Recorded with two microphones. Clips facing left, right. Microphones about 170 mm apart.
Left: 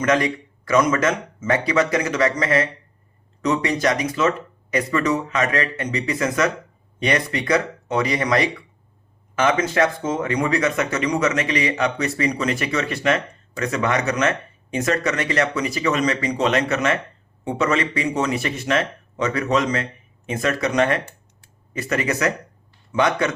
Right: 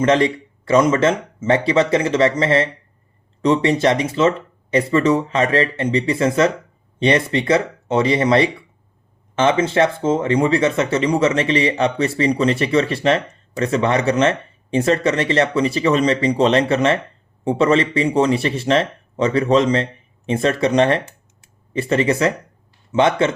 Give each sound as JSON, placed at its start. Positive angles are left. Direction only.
{"t": 0.0, "sound": "speech", "side_deg": -25}